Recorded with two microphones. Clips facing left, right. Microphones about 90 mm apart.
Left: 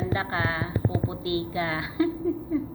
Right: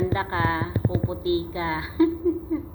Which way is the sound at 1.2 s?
30° right (ahead or behind).